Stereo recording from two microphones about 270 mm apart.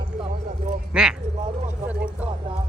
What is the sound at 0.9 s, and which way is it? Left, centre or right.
Speech, centre.